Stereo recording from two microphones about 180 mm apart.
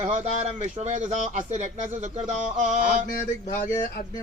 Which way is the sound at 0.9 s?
40° right (ahead or behind).